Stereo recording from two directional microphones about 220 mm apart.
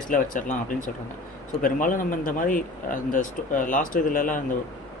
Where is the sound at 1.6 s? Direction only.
35° left (ahead or behind).